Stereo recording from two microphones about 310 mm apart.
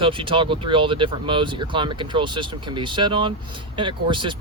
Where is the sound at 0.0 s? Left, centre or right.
Centre.